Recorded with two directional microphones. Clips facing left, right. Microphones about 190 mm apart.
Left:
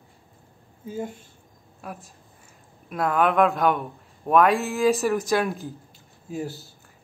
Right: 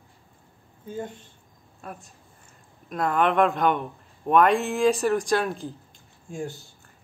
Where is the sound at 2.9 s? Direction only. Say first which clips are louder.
Left 1 dB; 5° left (ahead or behind).